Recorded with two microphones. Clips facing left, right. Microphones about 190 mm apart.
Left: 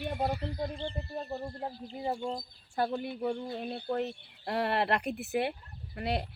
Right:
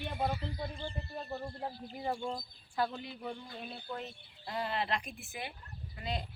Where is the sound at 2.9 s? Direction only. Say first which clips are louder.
Left 9 dB; 50° left (ahead or behind).